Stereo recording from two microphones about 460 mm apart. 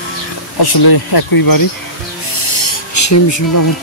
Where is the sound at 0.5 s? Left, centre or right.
Left.